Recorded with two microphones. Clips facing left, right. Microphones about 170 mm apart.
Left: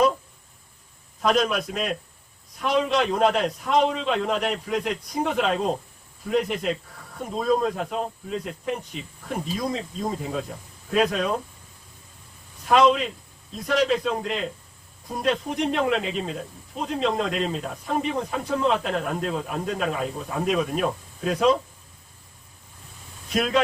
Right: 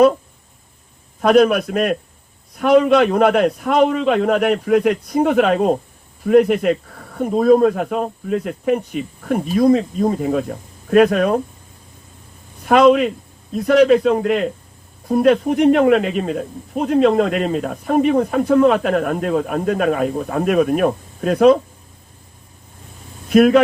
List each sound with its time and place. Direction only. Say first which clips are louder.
1.2 s speech: right 10 dB; 60° right (ahead or behind)
12.6 s a man's voice: right 7 dB; 60° right (ahead or behind)
23.3 s speech: right 14 dB; 60° right (ahead or behind)